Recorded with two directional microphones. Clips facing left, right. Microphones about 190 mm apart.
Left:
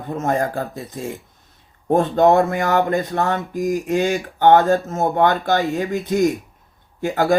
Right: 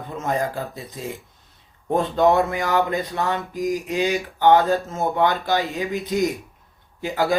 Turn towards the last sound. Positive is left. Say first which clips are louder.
# left 4 dB
turn(degrees=50)  # may be behind; listen again after turning